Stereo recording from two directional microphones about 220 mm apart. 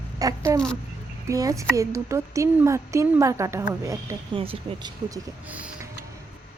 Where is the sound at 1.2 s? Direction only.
15° right (ahead or behind).